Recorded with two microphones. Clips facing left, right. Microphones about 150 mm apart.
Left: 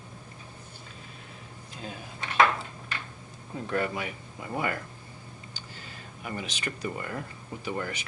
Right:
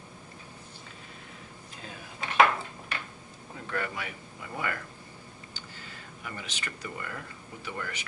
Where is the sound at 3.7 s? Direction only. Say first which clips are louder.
Left 4 dB; 20° left (ahead or behind).